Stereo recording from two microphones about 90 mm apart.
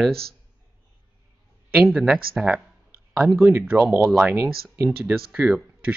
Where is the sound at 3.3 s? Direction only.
25° right (ahead or behind).